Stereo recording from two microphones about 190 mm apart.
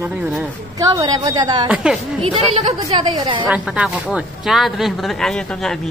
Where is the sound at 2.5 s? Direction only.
30° right (ahead or behind).